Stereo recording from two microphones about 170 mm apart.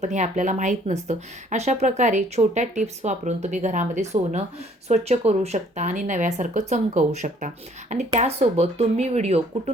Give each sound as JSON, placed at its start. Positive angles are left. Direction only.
{"t": 0.0, "sound": "speech", "side_deg": -45}